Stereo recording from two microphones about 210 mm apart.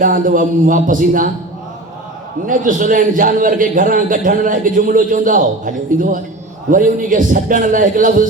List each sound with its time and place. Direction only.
0.0 s a man's voice: 40° right (ahead or behind)
2.5 s a man's voice: 40° right (ahead or behind)